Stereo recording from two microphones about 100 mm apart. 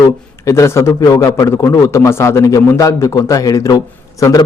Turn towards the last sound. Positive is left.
turn(degrees=35)  # may be behind; listen again after turning